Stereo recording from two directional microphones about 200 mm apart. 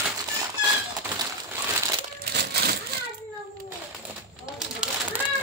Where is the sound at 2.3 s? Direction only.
55° right (ahead or behind).